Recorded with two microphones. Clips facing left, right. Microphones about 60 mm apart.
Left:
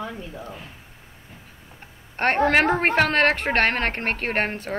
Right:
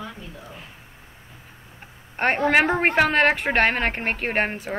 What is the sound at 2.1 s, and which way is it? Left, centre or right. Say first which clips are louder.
A woman's voice: even; centre.